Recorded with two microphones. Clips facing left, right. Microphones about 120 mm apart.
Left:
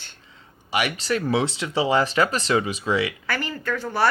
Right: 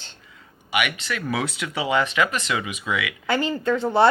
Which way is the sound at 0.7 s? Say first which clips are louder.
Left 2 dB; 30° left (ahead or behind).